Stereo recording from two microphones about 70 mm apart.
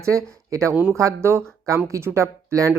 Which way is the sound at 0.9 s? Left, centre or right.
Right.